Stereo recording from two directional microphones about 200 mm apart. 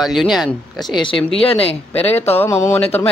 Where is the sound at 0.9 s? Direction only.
25° left (ahead or behind).